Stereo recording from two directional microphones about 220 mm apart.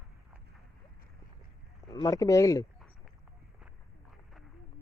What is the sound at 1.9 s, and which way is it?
Speech, 15° left (ahead or behind).